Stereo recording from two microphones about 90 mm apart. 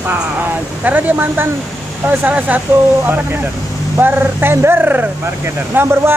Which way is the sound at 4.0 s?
25° right (ahead or behind).